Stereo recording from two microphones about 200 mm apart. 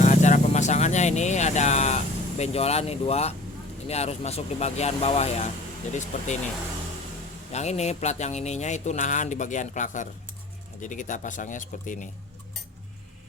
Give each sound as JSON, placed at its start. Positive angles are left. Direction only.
{"t": 0.0, "sound": "vehicle", "side_deg": 35}
{"t": 2.4, "sound": "speech", "side_deg": 30}
{"t": 7.5, "sound": "speech", "side_deg": 35}